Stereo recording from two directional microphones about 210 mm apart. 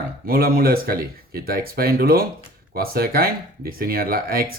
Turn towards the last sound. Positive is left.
turn(degrees=-45)  # may be behind; listen again after turning